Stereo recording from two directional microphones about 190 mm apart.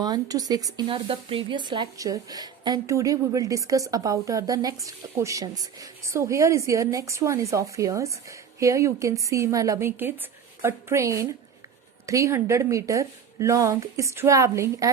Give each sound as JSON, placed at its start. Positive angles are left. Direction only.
{"t": 0.0, "sound": "a woman's voice", "side_deg": -20}